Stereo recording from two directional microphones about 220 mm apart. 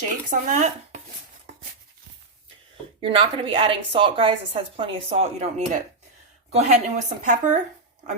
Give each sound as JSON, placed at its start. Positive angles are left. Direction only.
{"t": 0.3, "sound": "speech", "side_deg": -35}
{"t": 3.0, "sound": "speech", "side_deg": -25}